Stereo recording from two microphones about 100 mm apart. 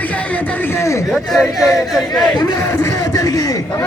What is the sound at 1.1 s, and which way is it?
Speech, centre (ahead or behind).